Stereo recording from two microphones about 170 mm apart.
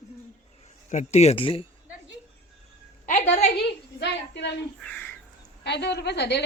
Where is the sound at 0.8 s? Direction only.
45° left (ahead or behind).